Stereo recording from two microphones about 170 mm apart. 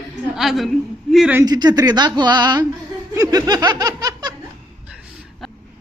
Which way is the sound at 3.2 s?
20° right (ahead or behind).